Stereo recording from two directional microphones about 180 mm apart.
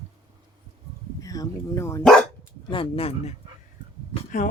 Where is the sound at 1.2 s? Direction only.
20° left (ahead or behind).